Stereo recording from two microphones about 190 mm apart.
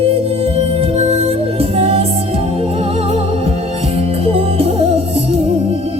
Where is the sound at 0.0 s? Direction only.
30° right (ahead or behind).